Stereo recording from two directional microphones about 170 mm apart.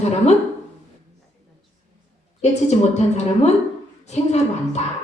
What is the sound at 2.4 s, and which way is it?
A woman's voice, 40° left (ahead or behind).